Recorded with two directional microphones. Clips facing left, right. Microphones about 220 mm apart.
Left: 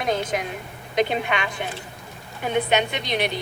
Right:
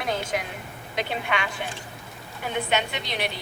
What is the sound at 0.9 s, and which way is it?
Speech, 20° left (ahead or behind).